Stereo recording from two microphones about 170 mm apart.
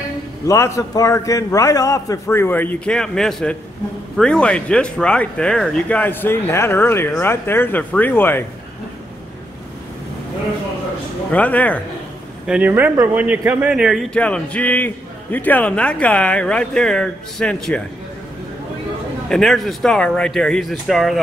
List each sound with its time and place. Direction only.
0.5 s speech: 15° left (ahead or behind)
11.3 s speech: 10° left (ahead or behind)
12.4 s a man's voice: 10° right (ahead or behind)
19.2 s a man's voice: 5° left (ahead or behind)